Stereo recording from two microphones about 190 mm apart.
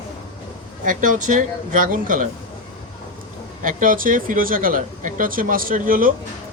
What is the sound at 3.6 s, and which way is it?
Speech, 45° right (ahead or behind).